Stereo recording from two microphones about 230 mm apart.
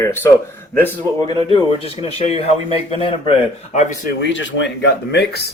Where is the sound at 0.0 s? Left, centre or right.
Centre.